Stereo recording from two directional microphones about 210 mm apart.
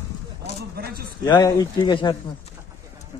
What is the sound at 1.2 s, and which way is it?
Speech, 15° left (ahead or behind).